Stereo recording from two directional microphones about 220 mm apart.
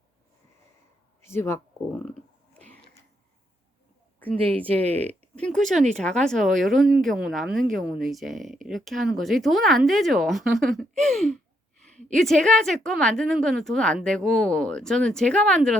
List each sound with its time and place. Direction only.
1.2 s speech: 10° left (ahead or behind)
4.4 s speech: 25° right (ahead or behind)
5.3 s speech: 5° left (ahead or behind)
5.7 s speech: 30° right (ahead or behind)
6.6 s speech: centre (ahead or behind)